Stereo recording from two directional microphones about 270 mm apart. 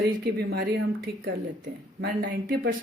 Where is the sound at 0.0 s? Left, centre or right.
Right.